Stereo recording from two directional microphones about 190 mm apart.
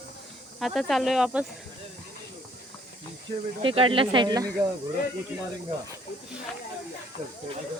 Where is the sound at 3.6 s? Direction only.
30° right (ahead or behind).